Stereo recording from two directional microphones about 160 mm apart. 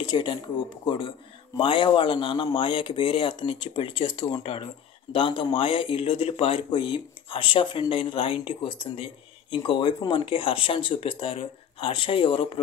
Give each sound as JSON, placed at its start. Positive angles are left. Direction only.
{"t": 0.0, "sound": "speech", "side_deg": 30}